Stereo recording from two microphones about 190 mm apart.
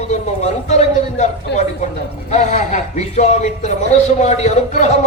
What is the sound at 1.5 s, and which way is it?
Speech, 60° left (ahead or behind).